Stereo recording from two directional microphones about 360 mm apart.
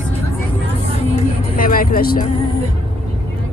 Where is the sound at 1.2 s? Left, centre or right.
Left.